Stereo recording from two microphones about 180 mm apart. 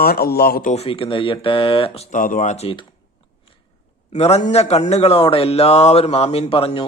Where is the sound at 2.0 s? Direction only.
50° left (ahead or behind).